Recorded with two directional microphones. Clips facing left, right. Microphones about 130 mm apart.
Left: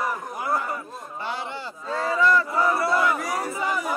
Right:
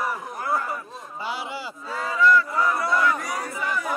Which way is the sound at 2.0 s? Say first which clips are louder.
Right 1 dB; 30° left (ahead or behind).